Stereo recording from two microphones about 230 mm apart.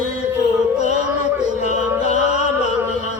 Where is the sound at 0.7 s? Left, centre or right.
Left.